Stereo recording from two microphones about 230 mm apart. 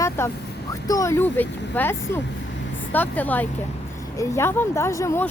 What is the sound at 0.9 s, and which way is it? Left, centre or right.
Speech, centre.